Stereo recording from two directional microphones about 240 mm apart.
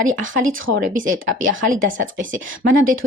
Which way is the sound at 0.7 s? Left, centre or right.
Right.